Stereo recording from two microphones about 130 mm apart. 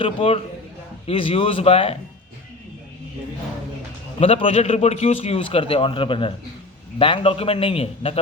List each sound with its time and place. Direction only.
0.0 s a man's voice: 45° left (ahead or behind)
4.2 s a man's voice: 45° left (ahead or behind)